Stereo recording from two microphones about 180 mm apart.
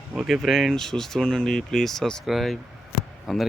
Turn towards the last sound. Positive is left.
turn(degrees=0)  # may be behind; listen again after turning